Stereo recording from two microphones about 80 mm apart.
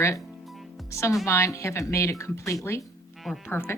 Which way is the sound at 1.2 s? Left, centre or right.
Left.